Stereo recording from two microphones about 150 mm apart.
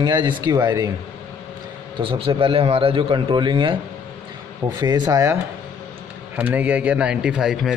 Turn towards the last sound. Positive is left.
turn(degrees=-5)  # may be behind; listen again after turning